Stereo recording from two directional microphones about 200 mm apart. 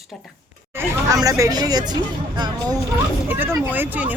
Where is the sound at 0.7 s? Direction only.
15° right (ahead or behind).